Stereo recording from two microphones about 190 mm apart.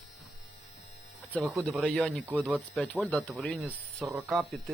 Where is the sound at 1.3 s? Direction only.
Centre (ahead or behind).